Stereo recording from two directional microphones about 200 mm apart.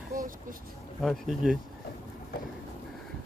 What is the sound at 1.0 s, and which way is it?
Speech, centre (ahead or behind).